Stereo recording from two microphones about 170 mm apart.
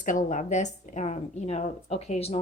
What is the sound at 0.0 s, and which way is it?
A woman's voice, 50° left (ahead or behind).